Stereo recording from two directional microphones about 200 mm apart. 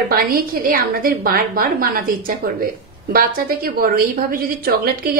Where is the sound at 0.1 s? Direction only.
45° right (ahead or behind).